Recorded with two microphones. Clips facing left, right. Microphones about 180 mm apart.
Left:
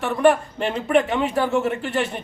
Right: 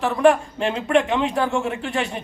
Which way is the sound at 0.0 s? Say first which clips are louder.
Right 1 dB; centre (ahead or behind).